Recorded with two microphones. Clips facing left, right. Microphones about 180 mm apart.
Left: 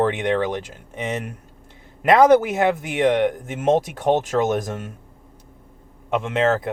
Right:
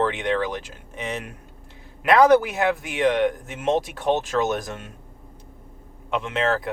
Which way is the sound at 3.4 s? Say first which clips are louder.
Left 4 dB; 45° left (ahead or behind).